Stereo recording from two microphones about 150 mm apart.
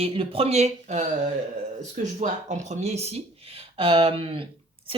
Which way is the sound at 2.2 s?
50° right (ahead or behind).